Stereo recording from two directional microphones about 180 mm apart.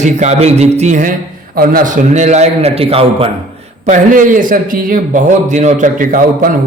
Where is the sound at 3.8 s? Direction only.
45° right (ahead or behind).